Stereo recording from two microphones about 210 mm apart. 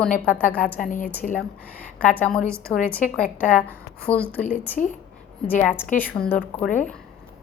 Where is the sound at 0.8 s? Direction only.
40° left (ahead or behind).